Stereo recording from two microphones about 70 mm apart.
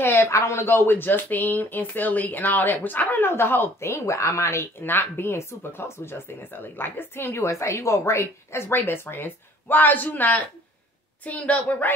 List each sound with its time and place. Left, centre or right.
0.0 s a woman's voice: left